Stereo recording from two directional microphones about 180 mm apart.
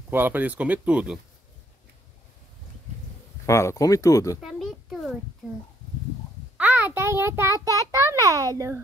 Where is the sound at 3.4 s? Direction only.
15° left (ahead or behind).